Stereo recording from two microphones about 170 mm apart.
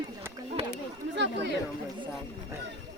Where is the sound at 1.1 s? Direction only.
90° right.